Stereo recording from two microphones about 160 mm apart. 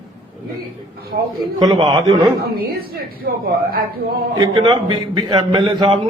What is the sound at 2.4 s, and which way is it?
A woman's voice, 75° right (ahead or behind).